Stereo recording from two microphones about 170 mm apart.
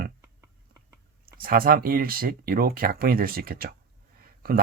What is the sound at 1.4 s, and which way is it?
Speech, 60° right (ahead or behind).